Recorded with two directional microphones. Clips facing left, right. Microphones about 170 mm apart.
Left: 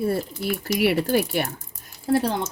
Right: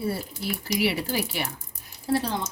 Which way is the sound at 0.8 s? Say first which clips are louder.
Left 7 dB; 55° left (ahead or behind).